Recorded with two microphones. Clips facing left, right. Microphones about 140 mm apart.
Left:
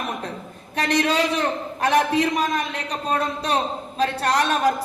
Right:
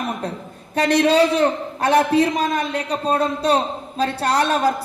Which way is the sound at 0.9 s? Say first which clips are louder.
Right 6 dB; 30° right (ahead or behind).